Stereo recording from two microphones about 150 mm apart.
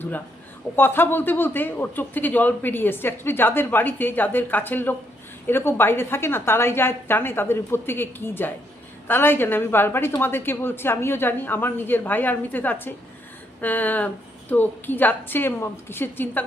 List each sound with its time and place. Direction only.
0.8 s speech: 15° left (ahead or behind)